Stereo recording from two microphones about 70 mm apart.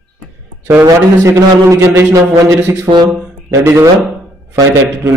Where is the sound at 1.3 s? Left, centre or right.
Right.